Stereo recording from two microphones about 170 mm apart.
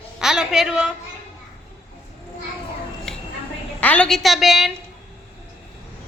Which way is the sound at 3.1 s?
5° left (ahead or behind).